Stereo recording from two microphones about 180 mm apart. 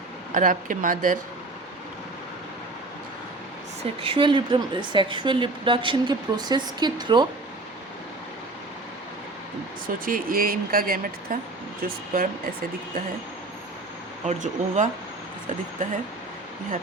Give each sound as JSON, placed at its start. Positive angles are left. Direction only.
{"t": 0.3, "sound": "speech", "side_deg": -45}
{"t": 4.0, "sound": "a woman's voice", "side_deg": -30}
{"t": 9.8, "sound": "speech", "side_deg": -50}
{"t": 14.3, "sound": "speech", "side_deg": -45}